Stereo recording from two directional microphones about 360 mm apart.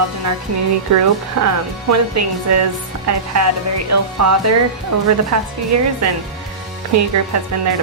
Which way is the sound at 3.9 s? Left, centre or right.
Right.